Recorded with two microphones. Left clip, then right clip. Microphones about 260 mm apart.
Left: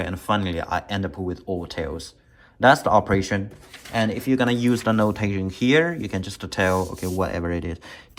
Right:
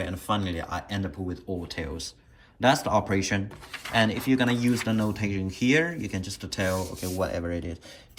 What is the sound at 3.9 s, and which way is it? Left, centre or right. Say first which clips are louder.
Speech: left 1 dB; centre.